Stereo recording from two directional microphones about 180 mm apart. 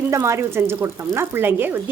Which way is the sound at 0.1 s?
15° right (ahead or behind).